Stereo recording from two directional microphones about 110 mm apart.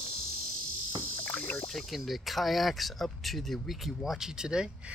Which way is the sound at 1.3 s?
15° left (ahead or behind).